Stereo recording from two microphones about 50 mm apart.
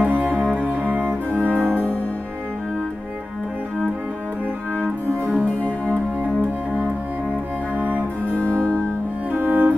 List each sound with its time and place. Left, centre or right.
0.0 s music: right
1.3 s music: left
5.5 s music: left
7.7 s cello: right
8.3 s music: left
9.3 s cello: right